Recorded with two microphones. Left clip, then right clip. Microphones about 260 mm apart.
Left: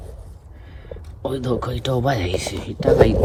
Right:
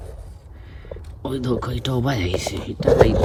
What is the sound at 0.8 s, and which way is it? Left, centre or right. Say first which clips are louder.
Speech: left 3 dB; centre.